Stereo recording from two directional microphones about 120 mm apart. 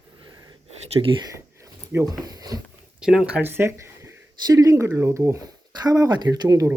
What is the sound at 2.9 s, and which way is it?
Speech, 5° right (ahead or behind).